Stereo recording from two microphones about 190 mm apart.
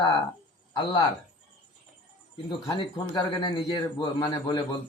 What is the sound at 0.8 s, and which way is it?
Speech, 20° left (ahead or behind).